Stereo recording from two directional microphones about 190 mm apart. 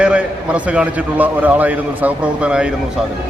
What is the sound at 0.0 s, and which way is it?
A man's voice, 5° right (ahead or behind).